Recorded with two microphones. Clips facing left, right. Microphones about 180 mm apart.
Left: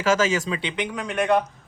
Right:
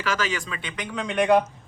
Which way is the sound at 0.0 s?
45° left (ahead or behind).